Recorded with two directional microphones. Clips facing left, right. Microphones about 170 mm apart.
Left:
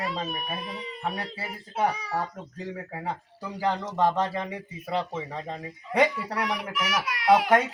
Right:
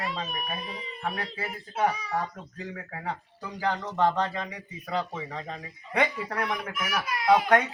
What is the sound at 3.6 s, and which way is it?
Speech, 10° left (ahead or behind).